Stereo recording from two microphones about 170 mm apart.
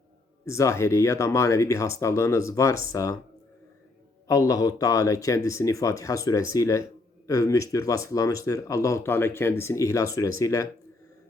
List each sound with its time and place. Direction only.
0.4 s speech: 15° left (ahead or behind)
4.3 s speech: 20° left (ahead or behind)